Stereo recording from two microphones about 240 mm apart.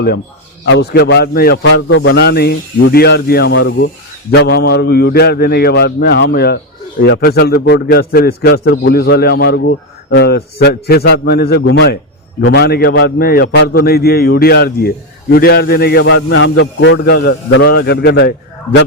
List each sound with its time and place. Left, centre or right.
0.6 s a man's voice: left
1.6 s a man's voice: left